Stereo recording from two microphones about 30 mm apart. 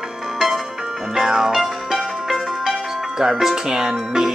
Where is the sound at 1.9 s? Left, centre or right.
Centre.